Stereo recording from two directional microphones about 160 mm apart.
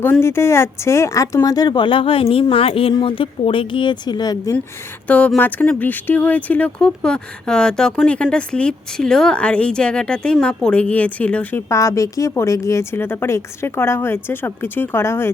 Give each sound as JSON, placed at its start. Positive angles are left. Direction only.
{"t": 0.0, "sound": "speech", "side_deg": 15}
{"t": 5.0, "sound": "speech", "side_deg": 10}